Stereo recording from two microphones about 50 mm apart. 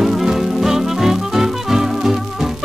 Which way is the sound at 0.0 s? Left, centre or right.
Centre.